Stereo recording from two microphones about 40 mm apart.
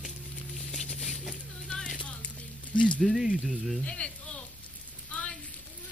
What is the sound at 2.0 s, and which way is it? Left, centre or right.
Music, left.